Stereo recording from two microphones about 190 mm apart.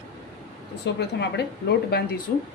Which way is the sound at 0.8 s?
65° left (ahead or behind).